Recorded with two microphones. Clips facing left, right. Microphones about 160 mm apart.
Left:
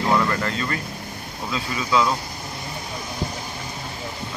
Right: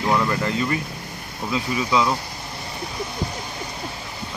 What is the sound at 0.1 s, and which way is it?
Speech, 10° right (ahead or behind).